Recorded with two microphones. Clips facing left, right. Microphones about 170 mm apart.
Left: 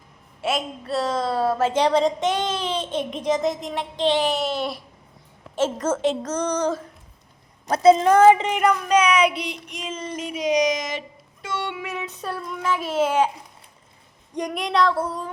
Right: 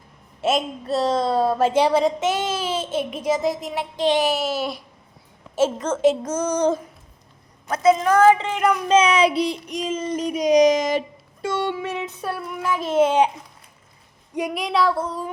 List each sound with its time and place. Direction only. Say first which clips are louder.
0.9 s child singing: right 3 dB; 35° right (ahead or behind)
1.3 s a child's voice: right 2 dB; 15° right (ahead or behind)
6.6 s babbling: right 4 dB; 20° right (ahead or behind)
7.7 s a woman's voice: left 2 dB; 30° left (ahead or behind)
8.8 s child singing: right 5 dB; 25° right (ahead or behind)
11.9 s a child's voice: right 2 dB; 10° right (ahead or behind)
12.8 s a child's voice: right 6 dB; 10° left (ahead or behind)
13.1 s babbling: right 2 dB; 20° right (ahead or behind)
14.3 s speech: even; 5° right (ahead or behind)